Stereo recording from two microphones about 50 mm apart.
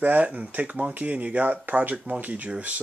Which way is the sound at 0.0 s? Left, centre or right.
Right.